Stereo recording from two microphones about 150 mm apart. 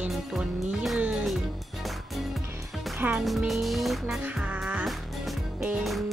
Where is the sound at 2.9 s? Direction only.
5° right (ahead or behind).